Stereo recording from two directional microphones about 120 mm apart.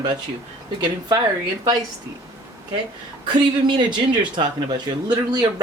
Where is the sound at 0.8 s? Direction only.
40° right (ahead or behind).